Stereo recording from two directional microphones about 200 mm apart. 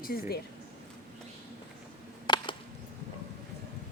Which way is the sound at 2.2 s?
20° left (ahead or behind).